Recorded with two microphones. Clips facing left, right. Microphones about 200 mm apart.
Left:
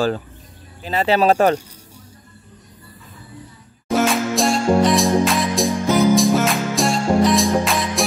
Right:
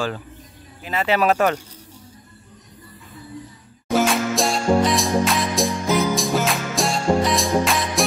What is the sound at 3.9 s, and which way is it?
Music, centre (ahead or behind).